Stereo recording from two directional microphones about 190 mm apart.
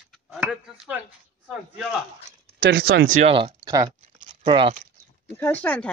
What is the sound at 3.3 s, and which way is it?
Speech, 25° right (ahead or behind).